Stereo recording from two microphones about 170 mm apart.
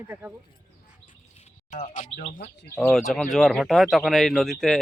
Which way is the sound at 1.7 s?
45° left (ahead or behind).